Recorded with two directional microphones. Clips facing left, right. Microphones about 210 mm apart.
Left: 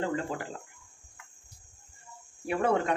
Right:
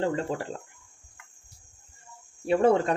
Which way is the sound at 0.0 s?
30° right (ahead or behind).